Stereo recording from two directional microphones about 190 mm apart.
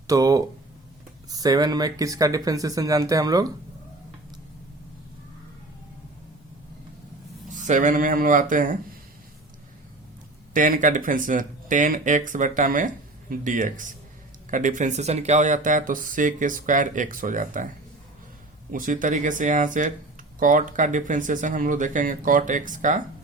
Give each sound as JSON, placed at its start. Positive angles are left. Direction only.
{"t": 0.1, "sound": "speech", "side_deg": -20}
{"t": 7.5, "sound": "speech", "side_deg": -40}
{"t": 10.5, "sound": "speech", "side_deg": -45}
{"t": 18.7, "sound": "speech", "side_deg": -45}